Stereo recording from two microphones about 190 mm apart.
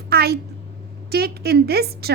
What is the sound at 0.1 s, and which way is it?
A woman's voice, 55° right (ahead or behind).